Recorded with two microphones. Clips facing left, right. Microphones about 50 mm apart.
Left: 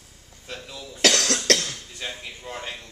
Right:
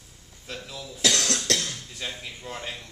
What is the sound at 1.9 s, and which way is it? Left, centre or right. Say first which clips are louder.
Speech: left 1 dB; centre.